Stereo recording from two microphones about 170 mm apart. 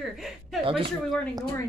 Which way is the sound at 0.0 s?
Centre (ahead or behind).